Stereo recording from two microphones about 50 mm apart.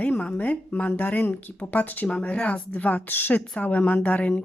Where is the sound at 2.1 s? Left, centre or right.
Centre.